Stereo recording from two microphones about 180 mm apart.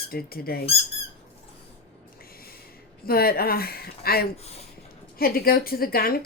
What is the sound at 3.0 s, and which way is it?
Speech, 55° left (ahead or behind).